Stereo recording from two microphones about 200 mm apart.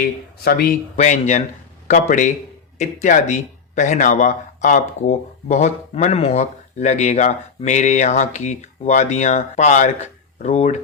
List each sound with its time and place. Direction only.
0.0 s speech: 50° left (ahead or behind)
0.9 s speech: 35° left (ahead or behind)